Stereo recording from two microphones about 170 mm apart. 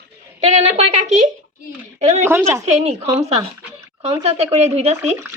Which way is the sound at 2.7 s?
40° right (ahead or behind).